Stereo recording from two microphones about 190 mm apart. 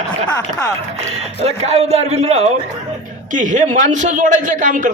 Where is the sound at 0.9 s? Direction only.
35° right (ahead or behind).